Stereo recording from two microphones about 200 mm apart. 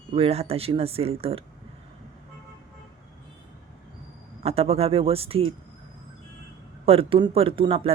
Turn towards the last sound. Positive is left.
turn(degrees=-30)  # may be behind; listen again after turning